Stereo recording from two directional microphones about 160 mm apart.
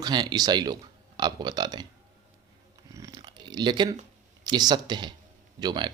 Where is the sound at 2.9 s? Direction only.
25° right (ahead or behind).